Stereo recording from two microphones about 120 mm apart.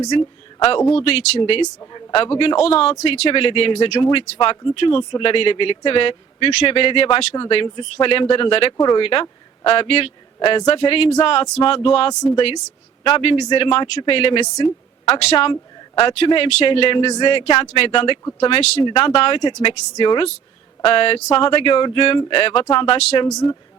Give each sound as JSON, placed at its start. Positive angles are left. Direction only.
{"t": 0.0, "sound": "speech", "side_deg": 35}
{"t": 0.9, "sound": "speech", "side_deg": 50}
{"t": 1.4, "sound": "a man's voice", "side_deg": 45}
{"t": 12.2, "sound": "speech", "side_deg": 45}
{"t": 14.4, "sound": "speech", "side_deg": 35}
{"t": 15.1, "sound": "speech", "side_deg": 55}
{"t": 17.1, "sound": "speech", "side_deg": 35}
{"t": 17.3, "sound": "speech", "side_deg": 50}
{"t": 18.8, "sound": "speech", "side_deg": 45}
{"t": 20.8, "sound": "speech", "side_deg": 50}
{"t": 23.1, "sound": "speech", "side_deg": 35}